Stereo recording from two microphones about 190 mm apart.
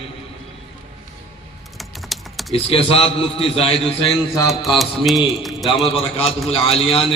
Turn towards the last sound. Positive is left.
turn(degrees=30)  # may be behind; listen again after turning